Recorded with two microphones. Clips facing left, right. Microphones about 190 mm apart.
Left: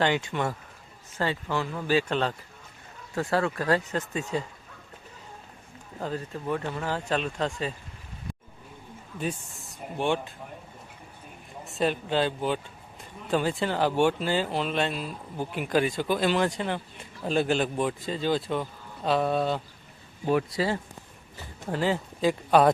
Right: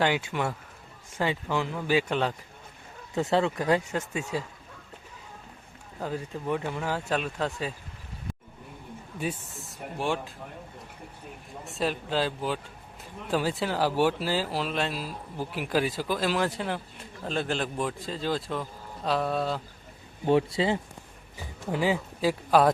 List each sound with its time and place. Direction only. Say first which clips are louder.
0.0 s speech: left 1 dB; 5° right (ahead or behind)
6.0 s speech: even; 10° right (ahead or behind)
9.3 s speech: right 1 dB; centre (ahead or behind)
11.6 s speech: left 3 dB; centre (ahead or behind)
20.2 s speech: right 2 dB; 25° right (ahead or behind)
21.3 s speech: right 1 dB; 10° right (ahead or behind)